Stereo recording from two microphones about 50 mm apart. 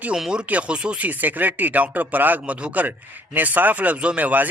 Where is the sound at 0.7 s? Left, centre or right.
Centre.